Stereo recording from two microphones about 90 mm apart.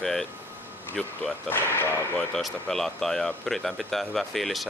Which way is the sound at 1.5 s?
25° left (ahead or behind).